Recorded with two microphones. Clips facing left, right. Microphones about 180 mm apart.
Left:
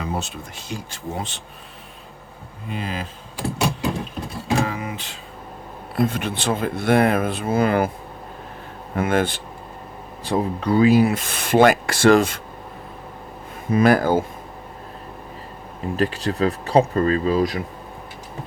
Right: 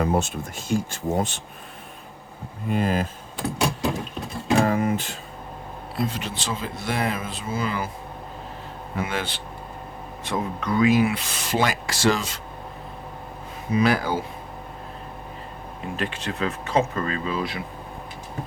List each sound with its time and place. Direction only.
0.0 s speech: 50° right (ahead or behind)
2.6 s speech: 50° right (ahead or behind)
4.6 s a sound: 45° right (ahead or behind)
6.0 s speech: 55° left (ahead or behind)
9.0 s speech: 50° left (ahead or behind)
10.2 s speech: 30° left (ahead or behind); by 12.4 s 55° left (ahead or behind)
13.7 s speech: 50° left (ahead or behind)
16.0 s speech: 35° left (ahead or behind)